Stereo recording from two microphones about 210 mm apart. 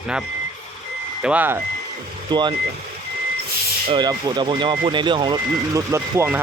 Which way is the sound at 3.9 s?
20° right (ahead or behind).